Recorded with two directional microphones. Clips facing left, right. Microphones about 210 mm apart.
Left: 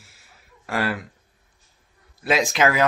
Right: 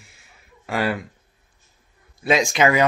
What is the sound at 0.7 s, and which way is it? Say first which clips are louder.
Speech: right 2 dB; centre (ahead or behind).